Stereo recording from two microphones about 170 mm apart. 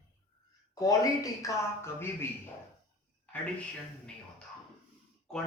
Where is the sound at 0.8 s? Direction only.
20° left (ahead or behind).